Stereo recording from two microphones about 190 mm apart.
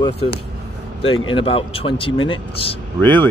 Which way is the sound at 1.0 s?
90° left.